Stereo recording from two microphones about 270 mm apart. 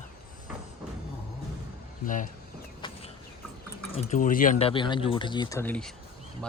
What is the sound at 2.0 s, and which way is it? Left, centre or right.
Speech, left.